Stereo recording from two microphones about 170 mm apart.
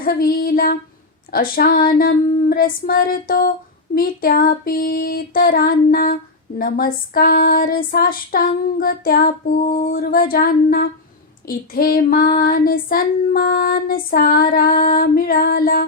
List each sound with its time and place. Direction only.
0.0 s female singing: 60° left (ahead or behind)